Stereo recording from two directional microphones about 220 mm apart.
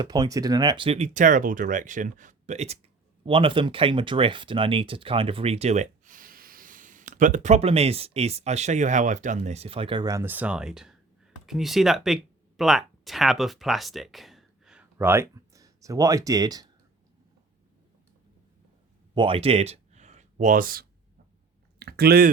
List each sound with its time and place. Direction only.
0.0 s speech: 20° right (ahead or behind)
19.1 s speech: 25° right (ahead or behind); by 20.8 s 40° right (ahead or behind)
21.8 s a sound: 45° right (ahead or behind)